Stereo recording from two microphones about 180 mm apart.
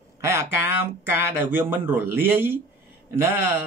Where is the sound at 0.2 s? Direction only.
15° right (ahead or behind).